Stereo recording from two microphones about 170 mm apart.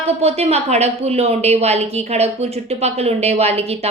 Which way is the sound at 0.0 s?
40° right (ahead or behind).